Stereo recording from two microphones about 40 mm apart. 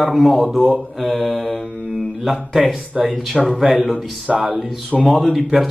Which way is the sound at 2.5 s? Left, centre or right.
Centre.